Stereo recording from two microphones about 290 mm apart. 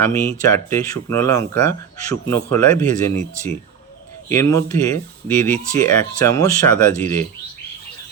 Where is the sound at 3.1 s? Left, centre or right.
Right.